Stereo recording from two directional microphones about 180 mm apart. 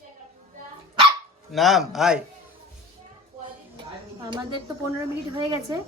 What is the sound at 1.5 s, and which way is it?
Speech, centre (ahead or behind).